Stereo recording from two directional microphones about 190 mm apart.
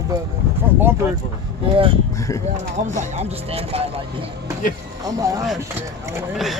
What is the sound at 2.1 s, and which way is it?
Speech, 15° left (ahead or behind).